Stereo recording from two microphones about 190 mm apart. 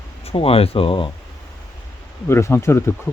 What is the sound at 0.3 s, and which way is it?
Speech, 30° left (ahead or behind).